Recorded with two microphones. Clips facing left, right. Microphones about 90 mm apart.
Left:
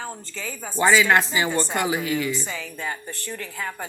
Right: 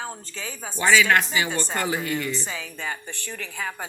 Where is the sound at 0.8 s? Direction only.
30° left (ahead or behind).